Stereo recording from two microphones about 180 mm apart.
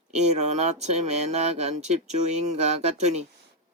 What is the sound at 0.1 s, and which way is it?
Speech, 40° right (ahead or behind).